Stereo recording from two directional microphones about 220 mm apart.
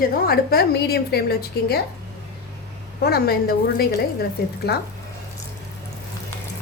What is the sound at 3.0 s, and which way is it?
Speech, 45° left (ahead or behind).